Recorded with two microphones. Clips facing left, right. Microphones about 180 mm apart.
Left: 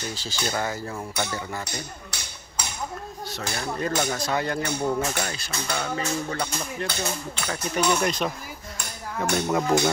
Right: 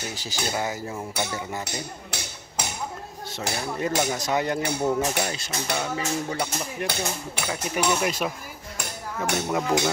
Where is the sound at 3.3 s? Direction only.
20° right (ahead or behind).